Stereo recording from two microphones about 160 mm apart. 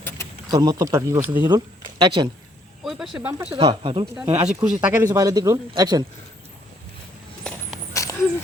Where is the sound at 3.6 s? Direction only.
30° right (ahead or behind).